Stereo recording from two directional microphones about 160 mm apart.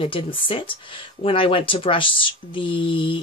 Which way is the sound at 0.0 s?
35° left (ahead or behind).